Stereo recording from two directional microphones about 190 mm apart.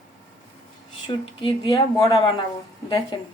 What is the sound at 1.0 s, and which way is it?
Speech, 25° left (ahead or behind).